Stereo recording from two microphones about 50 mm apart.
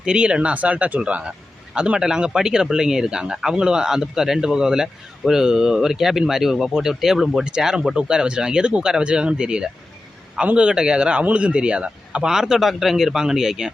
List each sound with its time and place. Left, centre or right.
0.0 s a man's voice: centre